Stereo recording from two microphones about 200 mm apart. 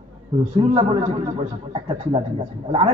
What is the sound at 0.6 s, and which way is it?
A man's voice, 25° right (ahead or behind).